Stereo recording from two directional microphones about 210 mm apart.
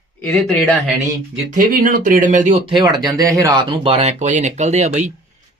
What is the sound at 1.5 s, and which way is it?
Speech, 40° right (ahead or behind).